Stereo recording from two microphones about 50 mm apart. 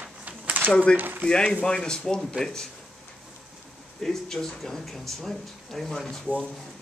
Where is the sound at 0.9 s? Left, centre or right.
Right.